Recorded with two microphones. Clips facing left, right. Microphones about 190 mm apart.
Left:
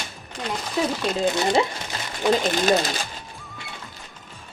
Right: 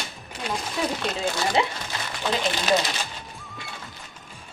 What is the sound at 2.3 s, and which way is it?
Speech, 45° left (ahead or behind).